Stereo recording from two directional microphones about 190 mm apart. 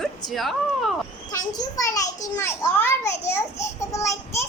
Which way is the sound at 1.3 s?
20° left (ahead or behind).